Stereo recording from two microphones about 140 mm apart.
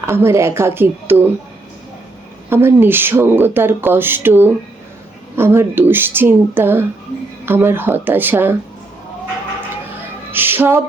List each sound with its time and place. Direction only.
0.1 s speech: 15° right (ahead or behind)
2.5 s speech: 15° right (ahead or behind)
10.3 s speech: 15° right (ahead or behind)